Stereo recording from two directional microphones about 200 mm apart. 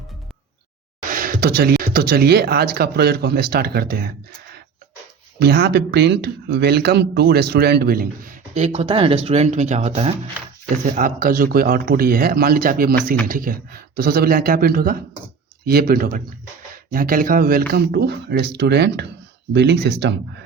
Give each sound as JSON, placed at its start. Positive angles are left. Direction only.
{"t": 1.1, "sound": "speech", "side_deg": -45}
{"t": 5.4, "sound": "speech", "side_deg": -55}
{"t": 10.8, "sound": "speech", "side_deg": -45}